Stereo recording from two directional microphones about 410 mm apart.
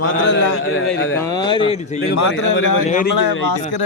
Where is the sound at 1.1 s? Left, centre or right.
Centre.